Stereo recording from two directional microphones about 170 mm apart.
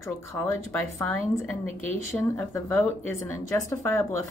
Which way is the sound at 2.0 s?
15° left (ahead or behind).